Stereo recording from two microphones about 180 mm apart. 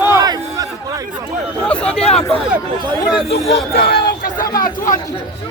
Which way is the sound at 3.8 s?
60° left (ahead or behind).